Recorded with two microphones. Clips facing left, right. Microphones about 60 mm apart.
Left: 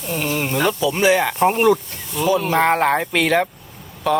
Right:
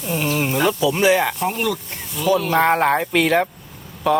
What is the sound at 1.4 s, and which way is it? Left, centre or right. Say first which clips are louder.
Speech: left 7 dB; left.